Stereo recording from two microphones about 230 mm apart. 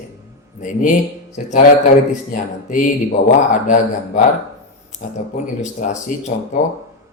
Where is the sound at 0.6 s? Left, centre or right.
Left.